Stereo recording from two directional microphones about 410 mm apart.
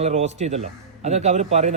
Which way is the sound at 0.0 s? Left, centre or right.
Centre.